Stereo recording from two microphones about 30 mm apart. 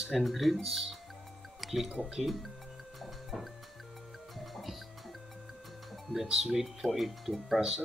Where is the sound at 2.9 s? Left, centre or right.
Centre.